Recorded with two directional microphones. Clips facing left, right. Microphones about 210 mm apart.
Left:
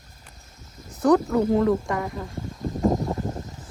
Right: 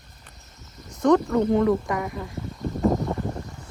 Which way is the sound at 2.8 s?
15° left (ahead or behind).